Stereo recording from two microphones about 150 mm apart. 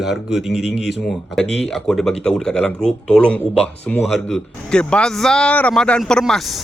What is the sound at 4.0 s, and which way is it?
Speech, centre (ahead or behind).